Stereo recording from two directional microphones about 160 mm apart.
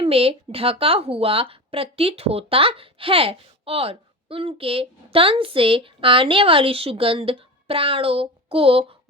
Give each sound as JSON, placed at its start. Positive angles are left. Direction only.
{"t": 0.0, "sound": "speech", "side_deg": -35}